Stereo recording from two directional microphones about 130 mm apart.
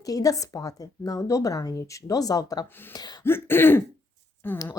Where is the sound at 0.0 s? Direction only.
30° left (ahead or behind).